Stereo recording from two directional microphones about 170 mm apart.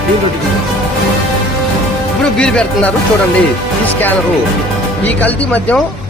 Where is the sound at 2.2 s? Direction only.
5° left (ahead or behind).